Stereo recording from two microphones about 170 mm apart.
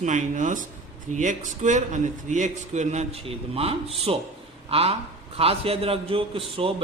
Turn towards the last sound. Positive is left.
turn(degrees=-35)  # may be behind; listen again after turning